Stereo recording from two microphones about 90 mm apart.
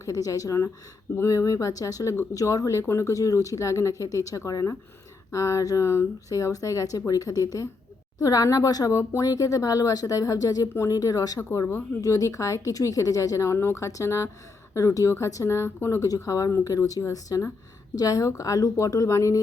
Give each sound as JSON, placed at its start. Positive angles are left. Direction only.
{"t": 0.0, "sound": "speech", "side_deg": 40}
{"t": 11.3, "sound": "speech", "side_deg": 25}
{"t": 12.0, "sound": "speech", "side_deg": 35}